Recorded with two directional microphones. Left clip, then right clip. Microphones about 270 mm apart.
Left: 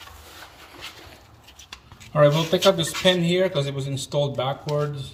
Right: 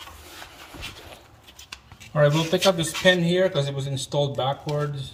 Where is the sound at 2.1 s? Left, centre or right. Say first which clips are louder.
Left 2 dB; centre.